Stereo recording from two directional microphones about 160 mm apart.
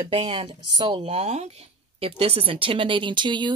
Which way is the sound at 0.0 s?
35° right (ahead or behind).